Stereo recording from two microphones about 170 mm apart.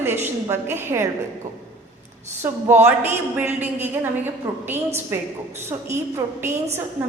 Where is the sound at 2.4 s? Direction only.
15° right (ahead or behind).